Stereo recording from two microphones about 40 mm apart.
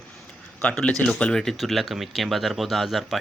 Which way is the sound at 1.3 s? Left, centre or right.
Centre.